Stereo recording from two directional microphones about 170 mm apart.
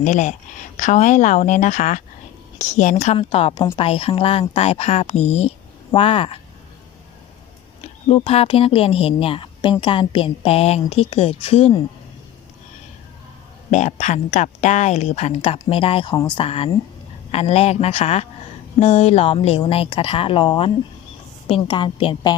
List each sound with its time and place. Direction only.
0.0 s speech: 45° left (ahead or behind)
3.2 s speech: 30° left (ahead or behind)
7.8 s speech: 35° left (ahead or behind)
13.7 s a woman's voice: 45° left (ahead or behind); by 22.4 s 30° left (ahead or behind)